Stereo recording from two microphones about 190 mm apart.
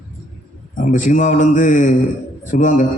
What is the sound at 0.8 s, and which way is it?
A man's voice, 45° left (ahead or behind).